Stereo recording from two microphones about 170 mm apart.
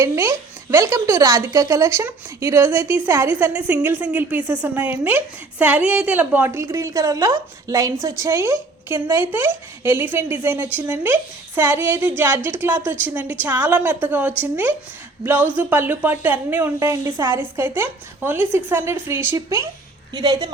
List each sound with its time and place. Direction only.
0.0 s a woman's voice: 15° right (ahead or behind)